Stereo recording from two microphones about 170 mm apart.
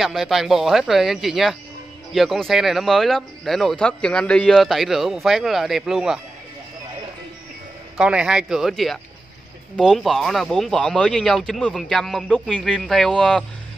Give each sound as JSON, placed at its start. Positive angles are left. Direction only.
{"t": 0.0, "sound": "speech", "side_deg": 0}
{"t": 8.0, "sound": "speech", "side_deg": -5}